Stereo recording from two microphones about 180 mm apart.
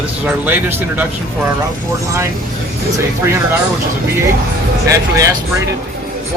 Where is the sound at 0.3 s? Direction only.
10° right (ahead or behind).